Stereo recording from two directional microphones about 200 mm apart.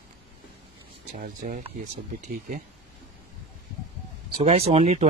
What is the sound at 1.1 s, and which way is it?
Speech, 45° right (ahead or behind).